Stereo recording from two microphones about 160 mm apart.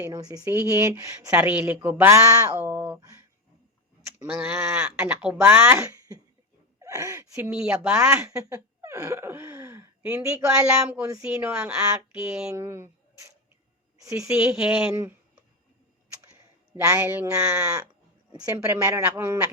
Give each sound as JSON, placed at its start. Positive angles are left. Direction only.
{"t": 0.0, "sound": "speech", "side_deg": -25}
{"t": 12.5, "sound": "speech", "side_deg": -15}
{"t": 14.0, "sound": "a woman's voice", "side_deg": -20}
{"t": 14.3, "sound": "speech", "side_deg": -5}
{"t": 16.7, "sound": "speech", "side_deg": -15}
{"t": 18.3, "sound": "speech", "side_deg": -20}